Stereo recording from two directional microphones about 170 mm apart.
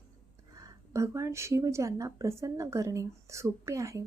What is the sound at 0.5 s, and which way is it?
Speech, 20° right (ahead or behind).